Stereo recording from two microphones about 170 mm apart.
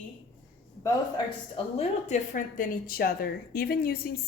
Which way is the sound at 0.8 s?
30° left (ahead or behind).